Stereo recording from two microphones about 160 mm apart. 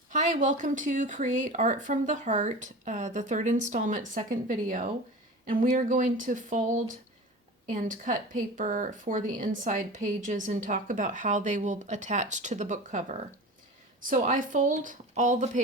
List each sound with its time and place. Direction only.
0.1 s a woman's voice: 50° right (ahead or behind)